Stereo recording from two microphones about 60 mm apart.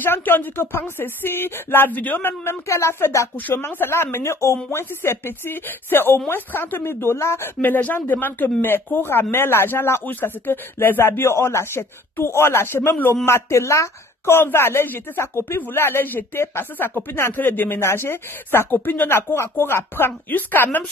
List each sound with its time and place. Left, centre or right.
0.0 s speech: left
2.7 s speech: left
7.6 s speech: left